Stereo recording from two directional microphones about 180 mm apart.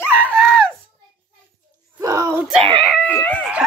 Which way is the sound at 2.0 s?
20° right (ahead or behind).